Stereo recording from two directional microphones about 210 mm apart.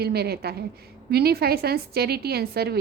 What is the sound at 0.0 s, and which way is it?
A woman's voice, 50° right (ahead or behind).